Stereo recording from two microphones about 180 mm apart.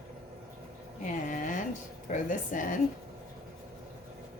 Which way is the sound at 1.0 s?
45° left (ahead or behind).